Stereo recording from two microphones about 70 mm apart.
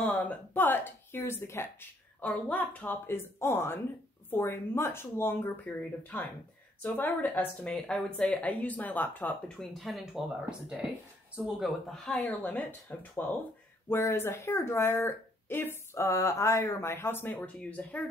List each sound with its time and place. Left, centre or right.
0.0 s speech: left
2.2 s speech: left
3.1 s speech: left
7.7 s speech: centre
9.6 s speech: centre
10.2 s speech: centre
11.9 s speech: centre
12.3 s speech: left